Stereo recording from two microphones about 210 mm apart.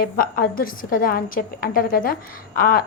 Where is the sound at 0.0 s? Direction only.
45° left (ahead or behind).